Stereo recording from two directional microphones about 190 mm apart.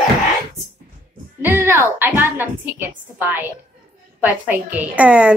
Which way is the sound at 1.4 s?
15° right (ahead or behind).